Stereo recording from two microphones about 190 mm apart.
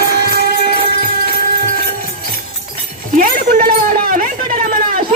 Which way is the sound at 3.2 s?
50° right (ahead or behind).